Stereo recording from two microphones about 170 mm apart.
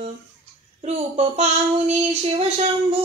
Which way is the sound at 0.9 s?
40° right (ahead or behind).